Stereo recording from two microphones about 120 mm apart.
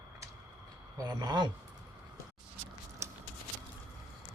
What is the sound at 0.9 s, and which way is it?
Speech, 35° right (ahead or behind).